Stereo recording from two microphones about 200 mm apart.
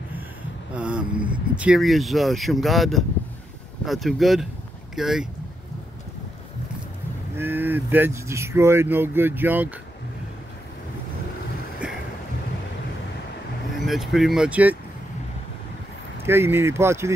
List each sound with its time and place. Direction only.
0.7 s speech: 5° right (ahead or behind)
7.3 s speech: 10° right (ahead or behind)
11.8 s boat: 5° right (ahead or behind)
13.8 s speech: centre (ahead or behind)
16.3 s speech: 10° right (ahead or behind)